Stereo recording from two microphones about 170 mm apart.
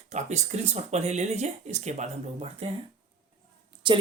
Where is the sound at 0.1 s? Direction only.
40° right (ahead or behind).